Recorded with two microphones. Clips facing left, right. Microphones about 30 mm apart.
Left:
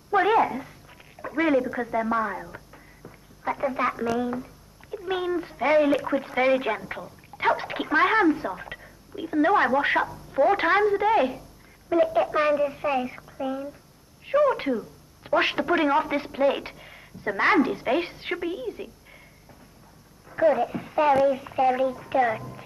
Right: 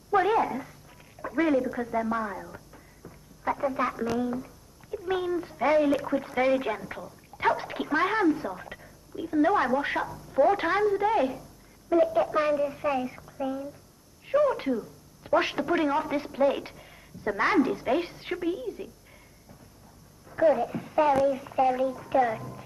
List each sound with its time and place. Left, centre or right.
0.1 s a sound: left
2.5 s telephone: left
4.9 s a child's voice: centre
20.2 s a woman's voice: centre